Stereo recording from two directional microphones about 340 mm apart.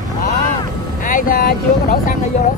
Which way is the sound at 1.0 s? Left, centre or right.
Left.